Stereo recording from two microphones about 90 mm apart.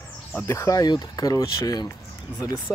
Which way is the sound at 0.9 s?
45° left (ahead or behind).